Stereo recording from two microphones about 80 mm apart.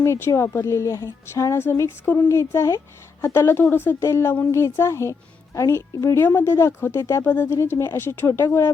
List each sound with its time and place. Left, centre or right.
0.0 s a woman's voice: left
6.1 s speech: left
7.0 s a woman's voice: left
7.3 s speech: left
7.5 s a woman's voice: left
8.3 s a woman's voice: left